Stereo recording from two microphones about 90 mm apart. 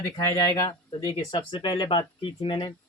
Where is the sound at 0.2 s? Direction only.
35° left (ahead or behind).